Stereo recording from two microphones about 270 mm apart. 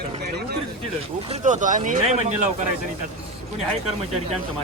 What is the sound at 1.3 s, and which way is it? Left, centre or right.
Speech, right.